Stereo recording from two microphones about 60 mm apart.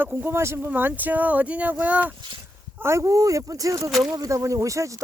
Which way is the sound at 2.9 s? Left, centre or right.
Right.